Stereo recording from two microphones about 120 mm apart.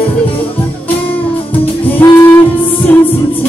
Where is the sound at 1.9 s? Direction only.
20° left (ahead or behind).